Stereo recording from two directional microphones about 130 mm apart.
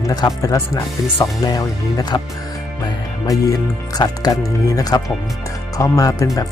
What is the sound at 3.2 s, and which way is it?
Speech, 25° left (ahead or behind).